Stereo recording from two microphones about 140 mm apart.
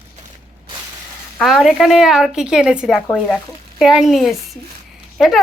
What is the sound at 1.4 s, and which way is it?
A woman's voice, centre (ahead or behind).